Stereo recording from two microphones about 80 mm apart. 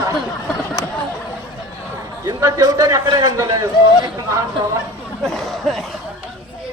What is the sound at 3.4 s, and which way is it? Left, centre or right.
Speech, right.